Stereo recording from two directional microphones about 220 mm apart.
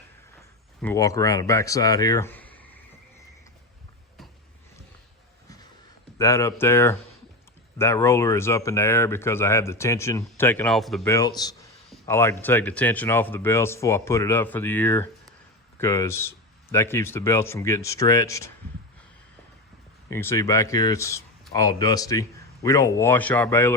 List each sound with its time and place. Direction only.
0.8 s speech: 10° left (ahead or behind)
6.1 s speech: 15° left (ahead or behind)
11.0 s speech: 15° left (ahead or behind)
20.1 s speech: 15° left (ahead or behind)